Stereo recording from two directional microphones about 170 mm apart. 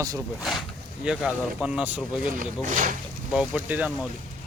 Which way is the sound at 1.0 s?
5° right (ahead or behind).